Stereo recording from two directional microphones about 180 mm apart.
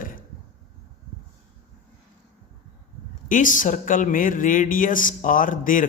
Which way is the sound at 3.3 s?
45° left (ahead or behind).